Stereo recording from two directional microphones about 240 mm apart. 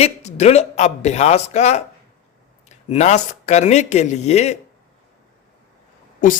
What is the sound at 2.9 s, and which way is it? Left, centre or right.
A man's voice, left.